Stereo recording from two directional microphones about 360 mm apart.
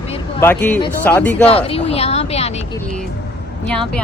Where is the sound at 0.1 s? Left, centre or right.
Centre.